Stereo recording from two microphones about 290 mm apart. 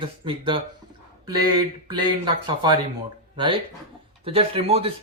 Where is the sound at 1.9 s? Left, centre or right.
Centre.